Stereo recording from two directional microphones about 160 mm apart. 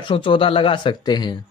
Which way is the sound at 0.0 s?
30° left (ahead or behind).